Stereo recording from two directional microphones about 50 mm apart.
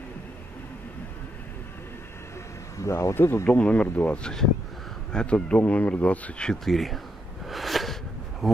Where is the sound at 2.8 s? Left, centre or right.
Left.